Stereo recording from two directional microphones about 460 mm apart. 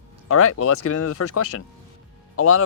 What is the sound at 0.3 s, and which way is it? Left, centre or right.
Speech, left.